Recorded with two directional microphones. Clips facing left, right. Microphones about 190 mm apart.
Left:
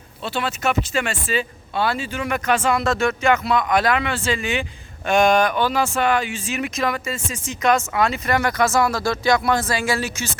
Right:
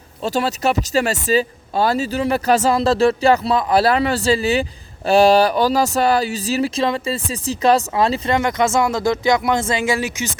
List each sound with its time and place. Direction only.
0.2 s speech: 40° right (ahead or behind); by 10.3 s 15° right (ahead or behind)